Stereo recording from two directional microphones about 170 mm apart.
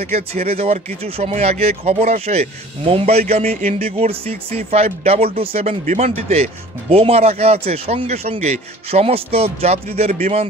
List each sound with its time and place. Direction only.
0.0 s speech: 40° right (ahead or behind)